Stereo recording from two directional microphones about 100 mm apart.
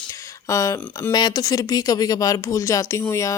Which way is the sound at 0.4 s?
30° left (ahead or behind).